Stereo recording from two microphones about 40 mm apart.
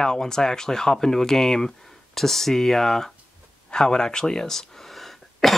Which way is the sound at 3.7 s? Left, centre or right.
Centre.